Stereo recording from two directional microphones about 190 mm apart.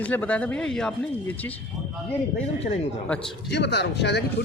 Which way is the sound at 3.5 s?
65° left (ahead or behind).